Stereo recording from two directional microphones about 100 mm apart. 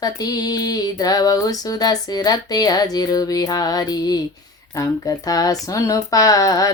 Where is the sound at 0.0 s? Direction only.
40° left (ahead or behind).